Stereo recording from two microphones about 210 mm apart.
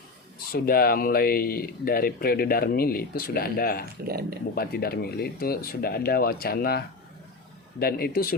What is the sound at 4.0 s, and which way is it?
Speech, 45° right (ahead or behind).